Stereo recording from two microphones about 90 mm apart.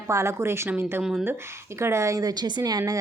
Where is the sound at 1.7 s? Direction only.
30° right (ahead or behind).